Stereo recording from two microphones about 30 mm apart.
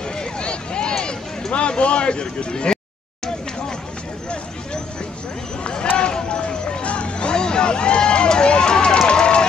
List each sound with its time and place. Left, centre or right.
0.2 s a sound: left
1.5 s speech: left
5.6 s a sound: left
5.9 s run: left
6.8 s music: left
7.3 s run: left